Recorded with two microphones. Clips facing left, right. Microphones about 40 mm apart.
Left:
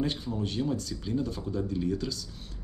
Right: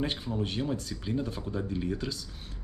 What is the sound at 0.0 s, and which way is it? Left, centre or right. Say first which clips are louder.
Speech: left 1 dB; right.